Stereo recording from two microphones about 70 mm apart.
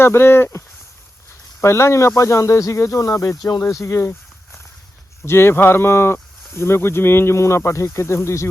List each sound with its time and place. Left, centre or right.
0.0 s speech: left
1.6 s speech: left
5.2 s speech: left